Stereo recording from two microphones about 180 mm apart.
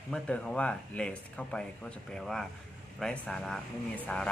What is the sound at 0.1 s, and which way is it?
Speech, 5° left (ahead or behind).